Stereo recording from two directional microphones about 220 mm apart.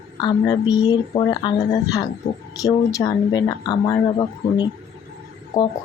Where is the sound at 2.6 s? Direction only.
15° left (ahead or behind).